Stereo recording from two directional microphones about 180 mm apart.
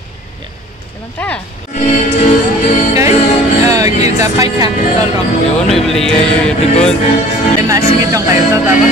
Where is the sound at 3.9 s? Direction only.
40° left (ahead or behind).